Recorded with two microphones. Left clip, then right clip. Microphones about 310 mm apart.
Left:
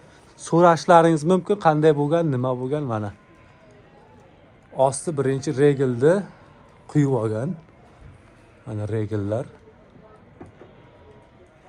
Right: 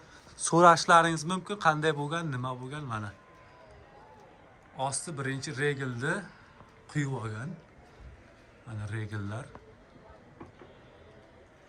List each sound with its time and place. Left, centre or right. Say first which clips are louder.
0.4 s a man's voice: left 4 dB; centre
4.8 s a man's voice: left 13 dB; centre
8.7 s a man's voice: left 14 dB; centre